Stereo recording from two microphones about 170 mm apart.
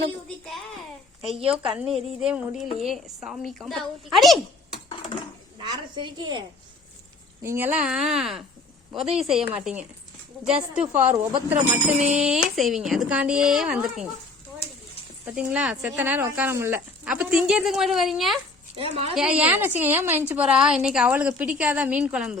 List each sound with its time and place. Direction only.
1.5 s speech: 5° right (ahead or behind)
5.5 s a woman's voice: 30° right (ahead or behind)
7.4 s a woman's voice: 10° right (ahead or behind)
15.2 s a woman's voice: 5° right (ahead or behind)
18.8 s a woman's voice: 35° right (ahead or behind)
19.1 s a woman's voice: 5° right (ahead or behind)